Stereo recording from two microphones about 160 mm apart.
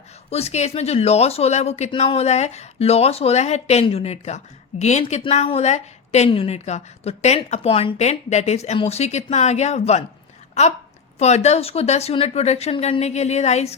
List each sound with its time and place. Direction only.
0.3 s a woman's voice: 40° left (ahead or behind)